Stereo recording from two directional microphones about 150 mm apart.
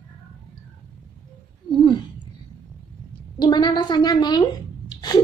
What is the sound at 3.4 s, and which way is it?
A woman's voice, 30° left (ahead or behind).